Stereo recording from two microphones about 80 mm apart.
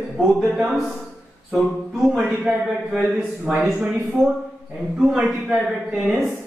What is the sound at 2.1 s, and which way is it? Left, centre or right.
A man's voice, centre.